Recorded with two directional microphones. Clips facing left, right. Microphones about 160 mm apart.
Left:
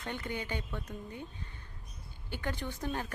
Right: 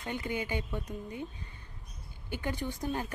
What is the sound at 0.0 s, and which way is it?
A woman's voice, 10° right (ahead or behind).